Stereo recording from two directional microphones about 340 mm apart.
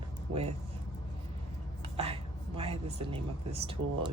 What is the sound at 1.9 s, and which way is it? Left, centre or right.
Speech, centre.